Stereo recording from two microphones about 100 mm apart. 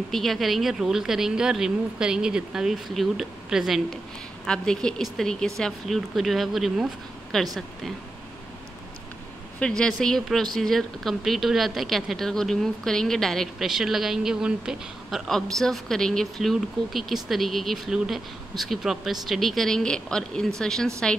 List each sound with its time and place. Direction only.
0.1 s speech: centre (ahead or behind)
9.6 s speech: 10° left (ahead or behind)